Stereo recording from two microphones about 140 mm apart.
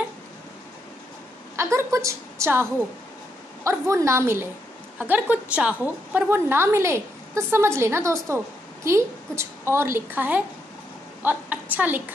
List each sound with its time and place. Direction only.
1.6 s a woman's voice: 20° right (ahead or behind)